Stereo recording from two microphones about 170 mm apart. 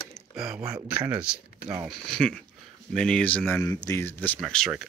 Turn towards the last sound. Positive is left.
turn(degrees=5)  # may be behind; listen again after turning